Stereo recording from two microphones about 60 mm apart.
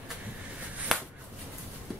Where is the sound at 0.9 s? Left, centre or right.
Centre.